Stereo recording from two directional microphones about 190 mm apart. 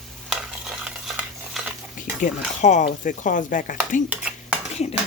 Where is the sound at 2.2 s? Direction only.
40° left (ahead or behind).